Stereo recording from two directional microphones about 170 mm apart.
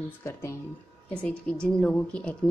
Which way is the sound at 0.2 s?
15° left (ahead or behind).